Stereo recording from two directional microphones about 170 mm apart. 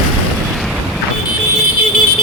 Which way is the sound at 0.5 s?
Centre (ahead or behind).